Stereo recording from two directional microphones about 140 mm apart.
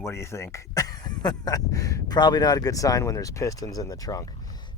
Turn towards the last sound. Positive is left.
turn(degrees=25)  # may be behind; listen again after turning